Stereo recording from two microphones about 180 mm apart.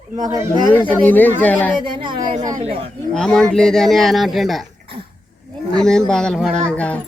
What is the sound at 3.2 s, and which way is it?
Speech, 5° left (ahead or behind).